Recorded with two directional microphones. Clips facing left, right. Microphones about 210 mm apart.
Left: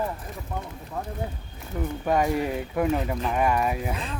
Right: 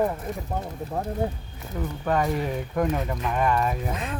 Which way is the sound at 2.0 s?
10° left (ahead or behind).